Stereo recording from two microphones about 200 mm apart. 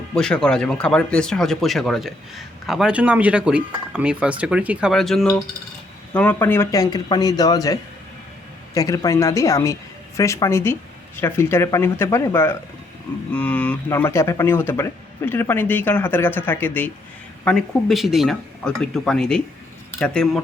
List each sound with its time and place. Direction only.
0.1 s speech: 5° left (ahead or behind)